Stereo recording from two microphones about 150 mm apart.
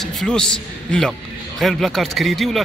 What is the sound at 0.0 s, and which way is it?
A man's voice, 5° left (ahead or behind).